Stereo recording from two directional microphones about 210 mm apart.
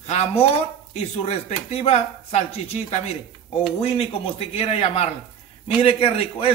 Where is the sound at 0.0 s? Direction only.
30° left (ahead or behind).